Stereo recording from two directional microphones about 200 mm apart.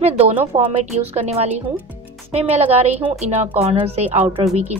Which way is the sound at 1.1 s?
30° right (ahead or behind).